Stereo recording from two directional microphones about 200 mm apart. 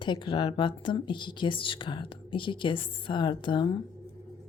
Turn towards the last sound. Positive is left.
turn(degrees=25)  # may be behind; listen again after turning